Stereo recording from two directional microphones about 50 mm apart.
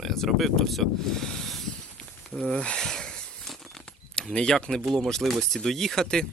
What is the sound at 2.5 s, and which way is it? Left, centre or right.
Speech, centre.